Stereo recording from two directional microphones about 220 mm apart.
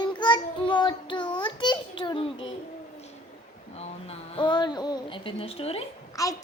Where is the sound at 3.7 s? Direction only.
25° left (ahead or behind).